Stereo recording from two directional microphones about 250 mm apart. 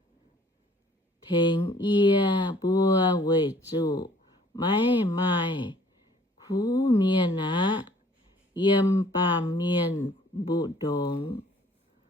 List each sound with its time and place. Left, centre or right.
1.3 s speech: centre